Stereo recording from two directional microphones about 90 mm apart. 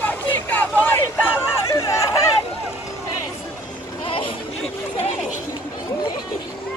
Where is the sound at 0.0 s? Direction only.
20° left (ahead or behind); by 2.0 s 35° left (ahead or behind).